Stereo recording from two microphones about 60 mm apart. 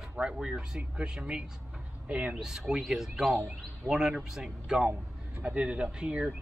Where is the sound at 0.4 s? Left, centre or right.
Centre.